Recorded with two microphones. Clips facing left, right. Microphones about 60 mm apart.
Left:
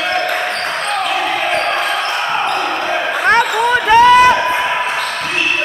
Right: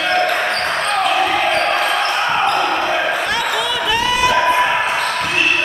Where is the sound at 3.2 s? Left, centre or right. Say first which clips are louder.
Left 7 dB; left.